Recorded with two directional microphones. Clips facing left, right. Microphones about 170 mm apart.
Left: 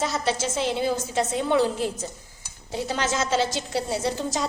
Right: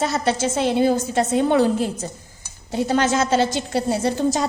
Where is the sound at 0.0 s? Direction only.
60° right (ahead or behind).